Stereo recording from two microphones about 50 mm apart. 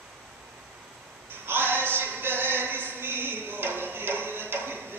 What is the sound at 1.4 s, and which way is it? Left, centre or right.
Music, right.